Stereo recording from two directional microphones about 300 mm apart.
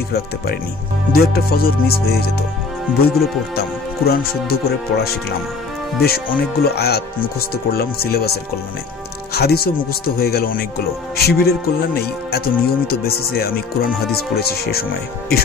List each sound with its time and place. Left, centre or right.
1.1 s speech: left
9.3 s speech: left